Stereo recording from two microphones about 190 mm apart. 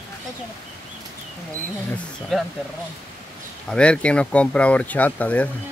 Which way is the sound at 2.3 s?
Centre (ahead or behind).